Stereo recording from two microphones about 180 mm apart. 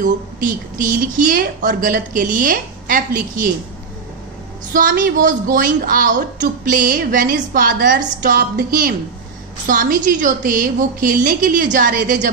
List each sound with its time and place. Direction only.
0.0 s a woman's voice: 50° right (ahead or behind)
4.7 s a woman's voice: 50° right (ahead or behind)
8.2 s music: 55° right (ahead or behind)
9.7 s a woman's voice: 50° right (ahead or behind)